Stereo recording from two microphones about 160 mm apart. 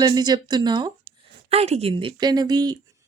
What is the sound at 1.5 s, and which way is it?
Speech, 40° right (ahead or behind).